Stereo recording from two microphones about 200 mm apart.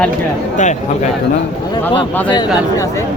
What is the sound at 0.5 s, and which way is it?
Speech, 35° left (ahead or behind).